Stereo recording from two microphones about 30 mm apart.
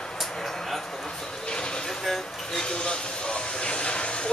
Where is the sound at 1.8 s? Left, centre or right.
Centre.